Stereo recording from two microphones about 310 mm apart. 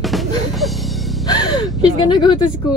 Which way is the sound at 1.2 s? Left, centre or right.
Centre.